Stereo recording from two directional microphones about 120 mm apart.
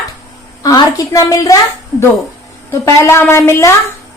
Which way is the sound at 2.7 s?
25° left (ahead or behind).